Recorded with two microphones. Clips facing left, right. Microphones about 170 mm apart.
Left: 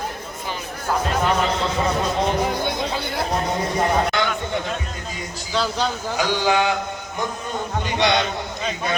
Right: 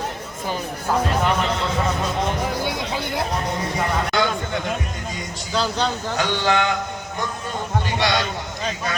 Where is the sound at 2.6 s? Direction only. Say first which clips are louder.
Left 1 dB; 15° right (ahead or behind).